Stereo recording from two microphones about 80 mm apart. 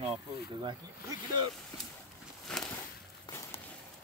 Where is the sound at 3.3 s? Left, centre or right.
Left.